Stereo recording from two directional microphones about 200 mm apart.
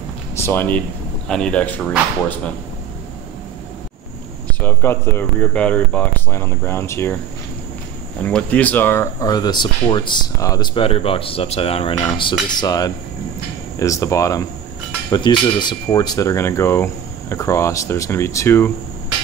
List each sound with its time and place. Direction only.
0.4 s speech: 10° left (ahead or behind)
4.5 s speech: 10° left (ahead or behind)
8.2 s speech: 5° left (ahead or behind)